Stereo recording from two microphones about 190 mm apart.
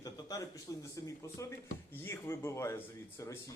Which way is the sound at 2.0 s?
15° left (ahead or behind).